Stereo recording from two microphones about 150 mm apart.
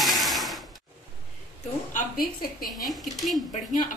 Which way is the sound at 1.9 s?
75° left (ahead or behind).